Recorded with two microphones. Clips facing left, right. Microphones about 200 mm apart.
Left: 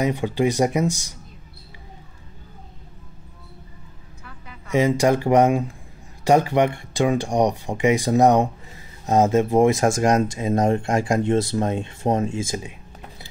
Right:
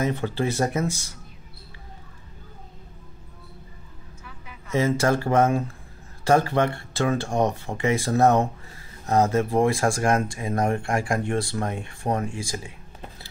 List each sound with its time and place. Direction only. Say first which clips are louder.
0.0 s speech: left 4 dB; 15° left (ahead or behind)
4.6 s speech: left 4 dB; 15° left (ahead or behind)